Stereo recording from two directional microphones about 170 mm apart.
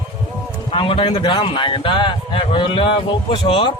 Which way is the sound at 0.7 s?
30° left (ahead or behind).